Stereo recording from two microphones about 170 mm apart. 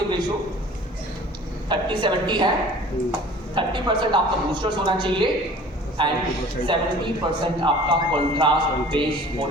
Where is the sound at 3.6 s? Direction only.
25° right (ahead or behind).